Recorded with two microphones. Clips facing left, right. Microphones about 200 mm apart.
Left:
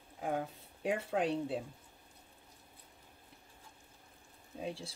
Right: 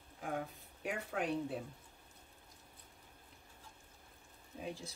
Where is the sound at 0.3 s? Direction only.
30° left (ahead or behind).